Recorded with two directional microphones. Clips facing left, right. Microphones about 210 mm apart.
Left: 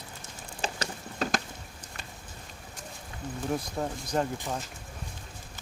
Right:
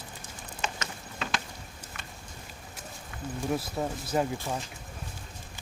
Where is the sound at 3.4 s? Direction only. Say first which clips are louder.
Right 1 dB; 5° right (ahead or behind).